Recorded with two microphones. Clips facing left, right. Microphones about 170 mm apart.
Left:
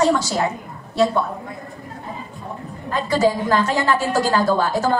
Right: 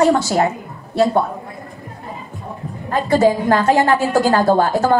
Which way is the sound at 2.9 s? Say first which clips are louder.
Right 4 dB; 55° right (ahead or behind).